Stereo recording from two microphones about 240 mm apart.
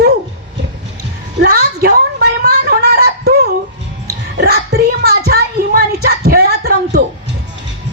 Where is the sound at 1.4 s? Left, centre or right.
Right.